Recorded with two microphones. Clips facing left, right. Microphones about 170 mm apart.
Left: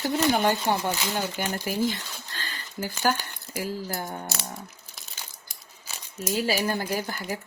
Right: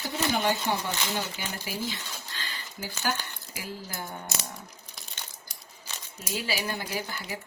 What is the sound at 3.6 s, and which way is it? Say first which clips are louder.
Speech: left 7 dB; 35° left (ahead or behind).